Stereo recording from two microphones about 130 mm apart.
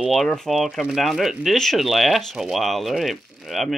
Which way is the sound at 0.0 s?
Centre (ahead or behind).